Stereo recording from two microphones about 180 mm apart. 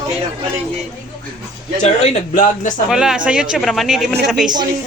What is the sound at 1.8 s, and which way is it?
Speech, 40° left (ahead or behind).